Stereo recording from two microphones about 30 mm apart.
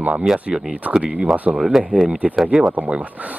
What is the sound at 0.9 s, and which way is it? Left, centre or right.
Speech, right.